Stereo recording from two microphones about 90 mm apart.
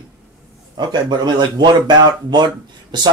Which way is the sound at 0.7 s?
50° right (ahead or behind).